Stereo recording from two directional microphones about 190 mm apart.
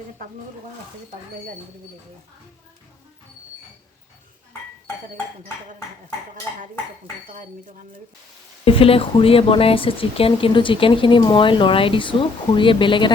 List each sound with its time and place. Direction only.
8.6 s speech: 30° left (ahead or behind)